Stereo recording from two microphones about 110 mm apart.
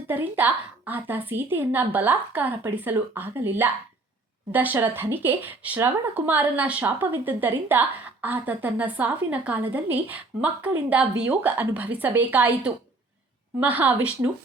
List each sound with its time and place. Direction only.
0.1 s speech: 15° right (ahead or behind)